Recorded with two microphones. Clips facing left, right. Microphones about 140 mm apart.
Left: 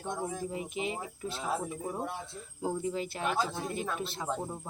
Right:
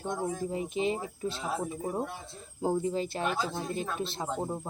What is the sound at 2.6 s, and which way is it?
Speech, 30° right (ahead or behind).